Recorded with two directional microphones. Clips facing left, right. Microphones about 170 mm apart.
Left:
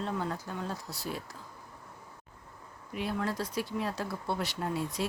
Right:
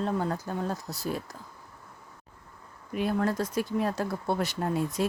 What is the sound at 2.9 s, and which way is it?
Speech, 50° right (ahead or behind).